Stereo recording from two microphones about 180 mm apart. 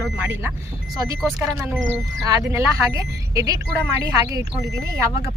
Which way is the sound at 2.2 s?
15° right (ahead or behind).